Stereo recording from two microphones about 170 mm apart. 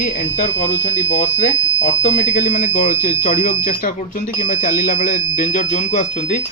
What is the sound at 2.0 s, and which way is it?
Speech, 45° left (ahead or behind).